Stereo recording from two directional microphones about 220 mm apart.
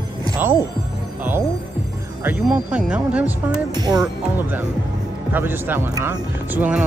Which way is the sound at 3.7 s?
20° right (ahead or behind).